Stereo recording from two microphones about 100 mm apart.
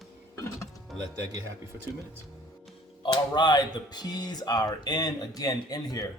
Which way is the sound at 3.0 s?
50° left (ahead or behind).